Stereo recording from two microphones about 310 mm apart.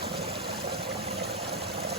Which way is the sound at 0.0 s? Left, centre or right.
Right.